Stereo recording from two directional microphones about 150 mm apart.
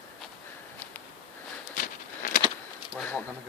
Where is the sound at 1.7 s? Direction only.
60° left (ahead or behind).